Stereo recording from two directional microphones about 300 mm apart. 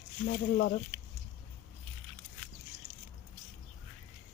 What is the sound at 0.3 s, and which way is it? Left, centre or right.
Speech, left.